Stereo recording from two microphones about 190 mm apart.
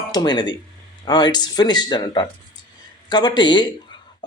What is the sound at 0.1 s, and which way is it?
Speech, 20° left (ahead or behind).